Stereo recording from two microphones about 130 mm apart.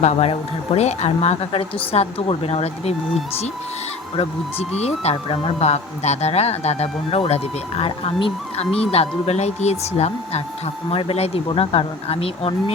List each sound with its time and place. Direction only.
0.0 s a man's voice: 55° left (ahead or behind)
4.2 s a man's voice: 50° left (ahead or behind)